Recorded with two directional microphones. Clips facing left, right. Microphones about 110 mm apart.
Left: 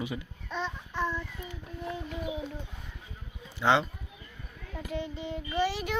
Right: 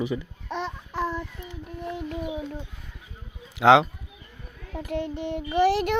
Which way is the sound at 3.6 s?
90° right.